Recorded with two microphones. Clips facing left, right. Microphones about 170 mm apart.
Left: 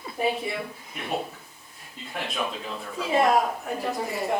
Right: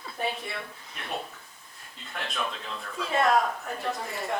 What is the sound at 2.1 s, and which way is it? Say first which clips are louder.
Speech: left 3 dB; 10° left (ahead or behind).